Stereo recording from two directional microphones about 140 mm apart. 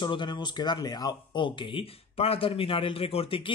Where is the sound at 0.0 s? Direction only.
35° left (ahead or behind).